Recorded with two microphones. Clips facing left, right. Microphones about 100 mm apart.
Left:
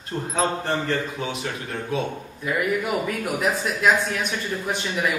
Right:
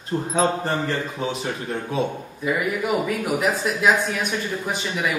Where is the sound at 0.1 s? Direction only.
5° right (ahead or behind).